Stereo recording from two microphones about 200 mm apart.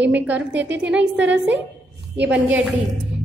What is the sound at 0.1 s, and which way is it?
A woman's voice, 10° right (ahead or behind).